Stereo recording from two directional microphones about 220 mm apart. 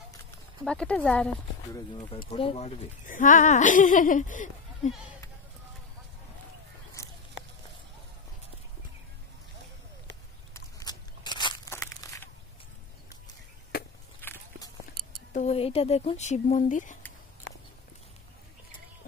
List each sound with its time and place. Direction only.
0.7 s speech: 5° left (ahead or behind)
2.3 s speech: 25° left (ahead or behind)
7.0 s a sound: 15° left (ahead or behind)
10.5 s crunch: 15° left (ahead or behind)
14.2 s walk: 10° left (ahead or behind)
15.3 s speech: 30° left (ahead or behind)